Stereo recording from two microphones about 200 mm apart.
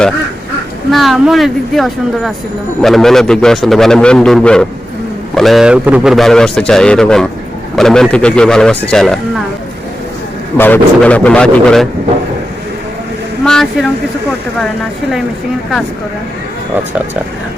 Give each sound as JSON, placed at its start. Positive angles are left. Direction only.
{"t": 0.9, "sound": "a man's voice", "side_deg": 0}
{"t": 10.6, "sound": "a man's voice", "side_deg": 10}
{"t": 13.4, "sound": "a sound", "side_deg": 5}